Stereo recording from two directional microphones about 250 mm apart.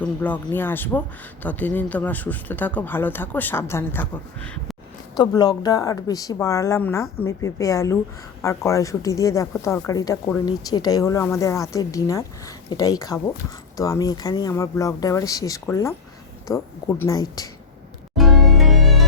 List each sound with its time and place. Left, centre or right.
0.0 s speech: centre
18.2 s music: centre